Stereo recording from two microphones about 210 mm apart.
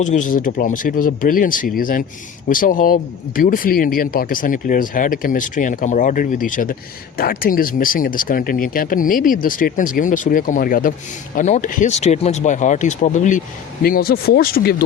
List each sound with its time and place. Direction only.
0.0 s speech: 35° left (ahead or behind)